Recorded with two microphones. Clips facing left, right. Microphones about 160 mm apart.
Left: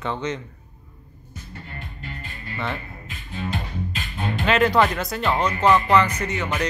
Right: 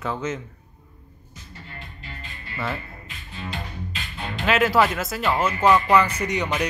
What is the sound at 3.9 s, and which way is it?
Music, 50° left (ahead or behind).